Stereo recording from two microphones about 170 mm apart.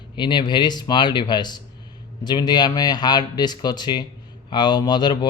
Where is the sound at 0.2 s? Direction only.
25° left (ahead or behind).